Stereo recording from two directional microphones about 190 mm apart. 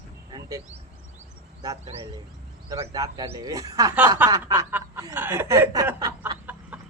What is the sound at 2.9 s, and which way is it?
Speech, 20° right (ahead or behind).